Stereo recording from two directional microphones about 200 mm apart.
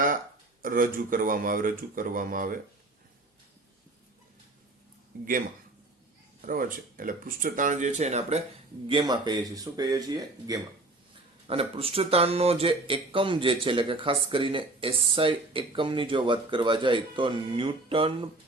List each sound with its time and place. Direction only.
0.6 s speech: 45° right (ahead or behind)
6.4 s speech: 45° right (ahead or behind)
8.9 s speech: 20° right (ahead or behind)
11.4 s speech: 30° right (ahead or behind)